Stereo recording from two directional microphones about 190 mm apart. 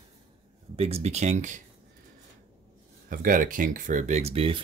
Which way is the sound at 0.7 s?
30° right (ahead or behind).